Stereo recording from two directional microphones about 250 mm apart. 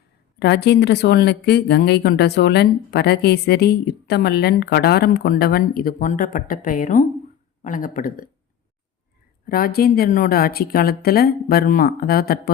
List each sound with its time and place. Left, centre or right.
0.3 s a woman's voice: left
9.5 s a woman's voice: left